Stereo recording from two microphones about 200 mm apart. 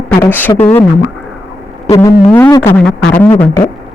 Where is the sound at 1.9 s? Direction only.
15° left (ahead or behind).